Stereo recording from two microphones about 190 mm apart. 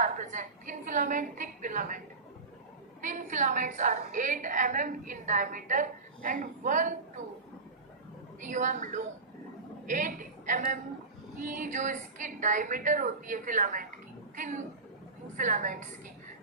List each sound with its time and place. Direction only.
0.0 s a woman's voice: 40° right (ahead or behind)
3.0 s a woman's voice: 40° right (ahead or behind)
8.4 s a woman's voice: 40° right (ahead or behind)